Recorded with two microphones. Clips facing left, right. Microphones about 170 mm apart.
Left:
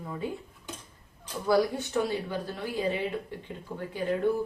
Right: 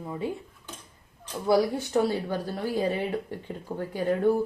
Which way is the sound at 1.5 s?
35° right (ahead or behind).